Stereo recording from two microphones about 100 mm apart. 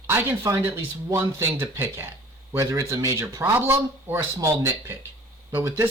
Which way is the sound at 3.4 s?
20° right (ahead or behind).